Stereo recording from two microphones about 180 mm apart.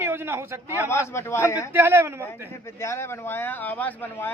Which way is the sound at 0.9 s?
15° left (ahead or behind).